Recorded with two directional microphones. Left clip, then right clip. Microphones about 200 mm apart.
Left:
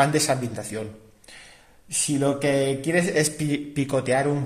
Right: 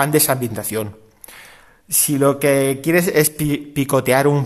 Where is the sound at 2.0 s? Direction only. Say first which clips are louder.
Right 7 dB; 40° right (ahead or behind).